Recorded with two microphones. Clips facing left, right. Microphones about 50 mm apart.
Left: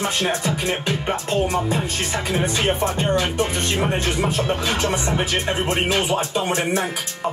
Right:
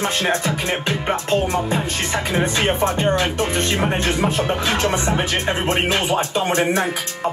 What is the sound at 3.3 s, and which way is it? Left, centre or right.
Speech, right.